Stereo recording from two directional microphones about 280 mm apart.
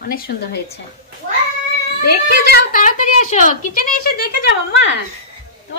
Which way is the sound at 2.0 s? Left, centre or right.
Left.